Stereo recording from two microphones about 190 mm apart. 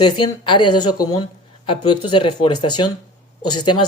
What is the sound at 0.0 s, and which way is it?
Speech, 25° left (ahead or behind).